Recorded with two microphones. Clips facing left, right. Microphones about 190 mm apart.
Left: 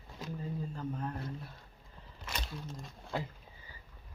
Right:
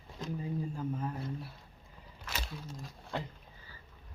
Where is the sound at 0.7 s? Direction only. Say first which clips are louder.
Right 2 dB; 5° right (ahead or behind).